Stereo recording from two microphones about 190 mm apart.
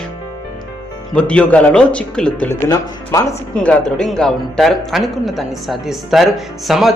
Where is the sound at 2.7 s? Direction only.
20° left (ahead or behind).